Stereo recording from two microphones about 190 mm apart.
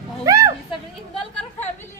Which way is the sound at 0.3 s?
15° right (ahead or behind).